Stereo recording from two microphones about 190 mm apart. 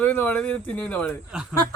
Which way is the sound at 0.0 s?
10° left (ahead or behind).